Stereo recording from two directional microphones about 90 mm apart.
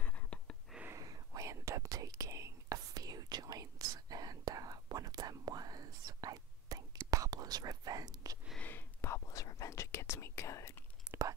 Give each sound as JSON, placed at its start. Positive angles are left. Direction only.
{"t": 0.0, "sound": "a sound", "side_deg": 15}
{"t": 0.9, "sound": "whispering", "side_deg": -40}
{"t": 8.5, "sound": "whispering", "side_deg": 20}
{"t": 11.1, "sound": "whispering", "side_deg": -10}